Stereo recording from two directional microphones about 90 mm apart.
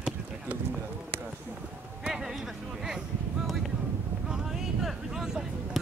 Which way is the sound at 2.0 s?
5° right (ahead or behind).